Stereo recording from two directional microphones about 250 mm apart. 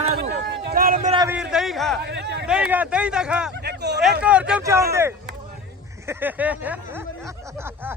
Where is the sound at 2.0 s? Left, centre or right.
Right.